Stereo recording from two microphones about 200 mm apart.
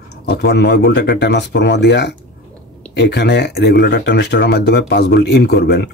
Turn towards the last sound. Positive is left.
turn(degrees=50)  # may be behind; listen again after turning